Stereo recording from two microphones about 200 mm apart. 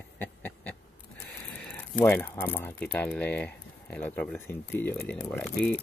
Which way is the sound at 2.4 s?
10° left (ahead or behind).